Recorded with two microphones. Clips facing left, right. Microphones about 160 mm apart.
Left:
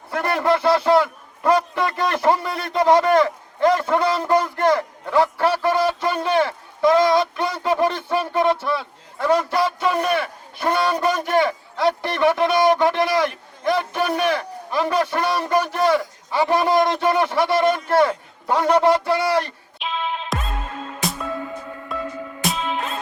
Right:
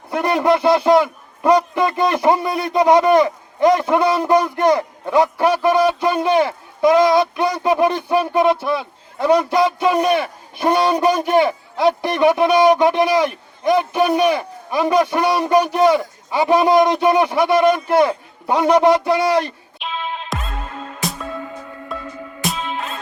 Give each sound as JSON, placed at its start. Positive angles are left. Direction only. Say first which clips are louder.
{"t": 0.1, "sound": "a man's voice", "louder": "right 4 dB", "side_deg": -15}
{"t": 19.8, "sound": "music", "louder": "even", "side_deg": 0}